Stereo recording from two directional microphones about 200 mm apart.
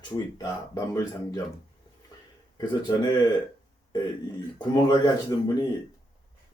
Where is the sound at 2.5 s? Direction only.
20° left (ahead or behind).